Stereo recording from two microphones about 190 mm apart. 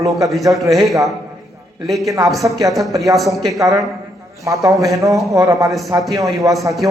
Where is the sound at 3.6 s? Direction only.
15° right (ahead or behind).